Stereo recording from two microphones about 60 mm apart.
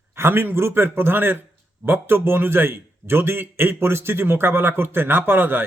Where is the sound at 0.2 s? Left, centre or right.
Right.